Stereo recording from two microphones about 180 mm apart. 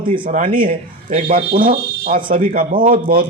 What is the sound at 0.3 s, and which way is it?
A man's voice, 50° right (ahead or behind).